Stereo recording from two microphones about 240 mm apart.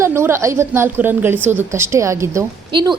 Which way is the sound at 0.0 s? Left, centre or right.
Centre.